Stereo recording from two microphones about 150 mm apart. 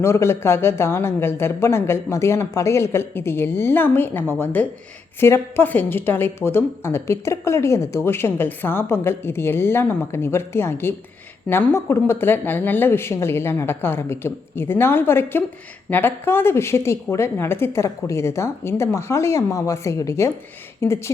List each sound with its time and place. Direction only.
0.0 s a woman's voice: 20° left (ahead or behind)